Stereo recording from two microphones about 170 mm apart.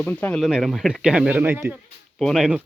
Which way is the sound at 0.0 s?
10° left (ahead or behind).